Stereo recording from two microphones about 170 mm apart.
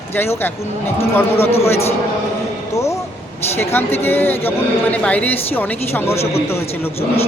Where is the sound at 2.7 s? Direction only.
20° left (ahead or behind).